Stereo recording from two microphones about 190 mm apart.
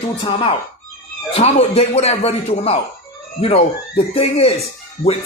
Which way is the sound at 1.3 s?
30° left (ahead or behind).